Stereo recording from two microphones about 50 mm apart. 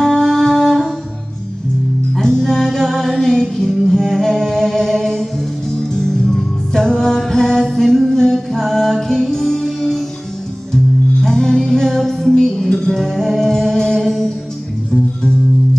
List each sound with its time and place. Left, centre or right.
0.0 s music: centre
2.1 s music: centre
11.2 s music: centre